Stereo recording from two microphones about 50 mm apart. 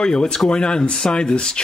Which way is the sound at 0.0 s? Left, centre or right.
Centre.